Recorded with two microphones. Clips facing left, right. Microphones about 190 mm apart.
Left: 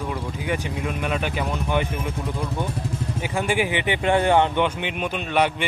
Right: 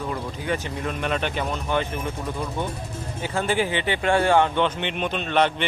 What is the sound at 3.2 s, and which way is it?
Speech, 15° left (ahead or behind).